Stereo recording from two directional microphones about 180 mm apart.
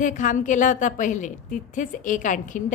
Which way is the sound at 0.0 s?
45° left (ahead or behind).